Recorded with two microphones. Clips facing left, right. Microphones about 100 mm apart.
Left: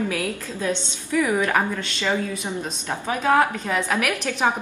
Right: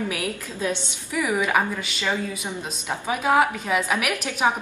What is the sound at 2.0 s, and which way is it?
Speech, 15° left (ahead or behind).